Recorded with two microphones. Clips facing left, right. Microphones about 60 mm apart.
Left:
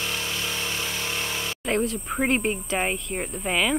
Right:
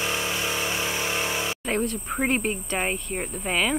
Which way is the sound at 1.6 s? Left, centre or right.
Centre.